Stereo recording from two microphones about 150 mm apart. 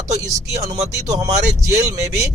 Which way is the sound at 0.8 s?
50° right (ahead or behind).